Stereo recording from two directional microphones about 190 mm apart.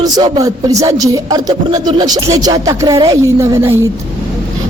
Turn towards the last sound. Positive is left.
turn(degrees=-15)  # may be behind; listen again after turning